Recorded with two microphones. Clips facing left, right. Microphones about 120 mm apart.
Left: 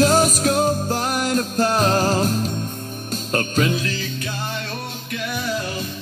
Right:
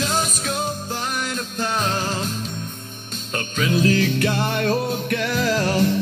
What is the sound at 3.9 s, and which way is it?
Music, 70° right (ahead or behind).